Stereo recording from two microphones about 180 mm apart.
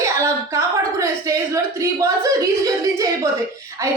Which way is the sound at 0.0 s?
15° right (ahead or behind).